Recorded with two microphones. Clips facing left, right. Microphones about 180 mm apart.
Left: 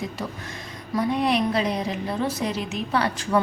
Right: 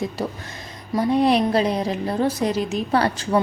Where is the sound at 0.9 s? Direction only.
35° right (ahead or behind).